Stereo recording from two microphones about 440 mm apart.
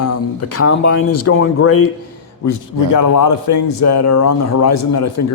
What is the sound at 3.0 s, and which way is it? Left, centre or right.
Speech, left.